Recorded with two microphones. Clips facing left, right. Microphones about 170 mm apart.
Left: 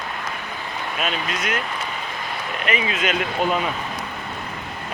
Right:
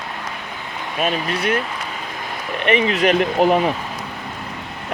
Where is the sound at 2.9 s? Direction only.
35° right (ahead or behind).